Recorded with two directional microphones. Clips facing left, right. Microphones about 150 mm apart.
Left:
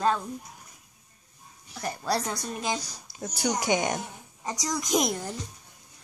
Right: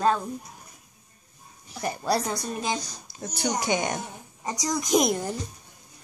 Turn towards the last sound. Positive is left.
turn(degrees=-15)  # may be behind; listen again after turning